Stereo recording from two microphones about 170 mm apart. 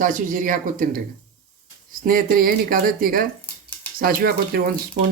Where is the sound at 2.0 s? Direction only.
55° right (ahead or behind).